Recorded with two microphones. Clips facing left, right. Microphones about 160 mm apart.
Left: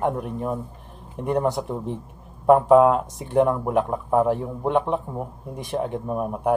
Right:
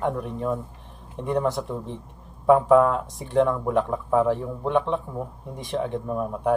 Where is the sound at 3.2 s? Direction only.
15° left (ahead or behind).